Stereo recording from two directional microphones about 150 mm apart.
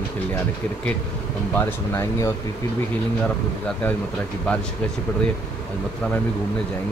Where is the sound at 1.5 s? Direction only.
15° left (ahead or behind).